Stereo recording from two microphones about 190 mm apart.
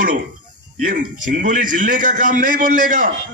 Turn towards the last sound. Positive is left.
turn(degrees=-45)  # may be behind; listen again after turning